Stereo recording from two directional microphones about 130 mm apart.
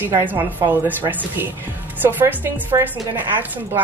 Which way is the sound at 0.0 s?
15° right (ahead or behind).